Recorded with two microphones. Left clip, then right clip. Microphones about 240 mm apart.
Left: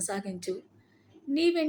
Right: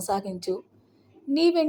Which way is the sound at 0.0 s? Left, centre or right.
Centre.